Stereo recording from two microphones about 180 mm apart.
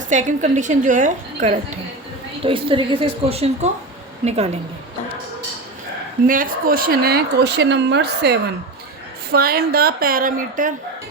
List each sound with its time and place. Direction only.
0.1 s a woman's voice: 45° right (ahead or behind)
2.4 s a woman's voice: 30° right (ahead or behind)
6.2 s speech: 50° right (ahead or behind)